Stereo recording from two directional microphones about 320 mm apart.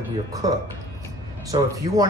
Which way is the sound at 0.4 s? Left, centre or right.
Centre.